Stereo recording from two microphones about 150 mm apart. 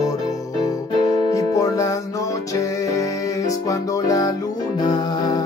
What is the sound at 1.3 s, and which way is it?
Music, 20° left (ahead or behind).